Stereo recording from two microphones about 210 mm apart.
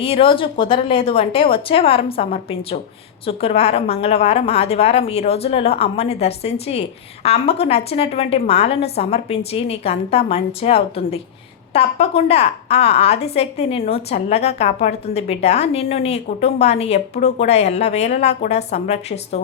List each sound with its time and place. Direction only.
0.0 s a woman's voice: 25° left (ahead or behind)